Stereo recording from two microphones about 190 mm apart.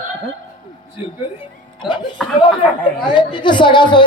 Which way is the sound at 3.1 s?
25° left (ahead or behind).